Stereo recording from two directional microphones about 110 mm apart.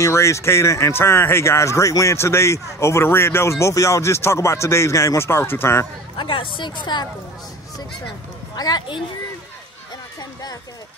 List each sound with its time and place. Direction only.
0.0 s speech: 25° left (ahead or behind)
6.1 s a woman's voice: 50° left (ahead or behind)
8.5 s speech: 40° left (ahead or behind)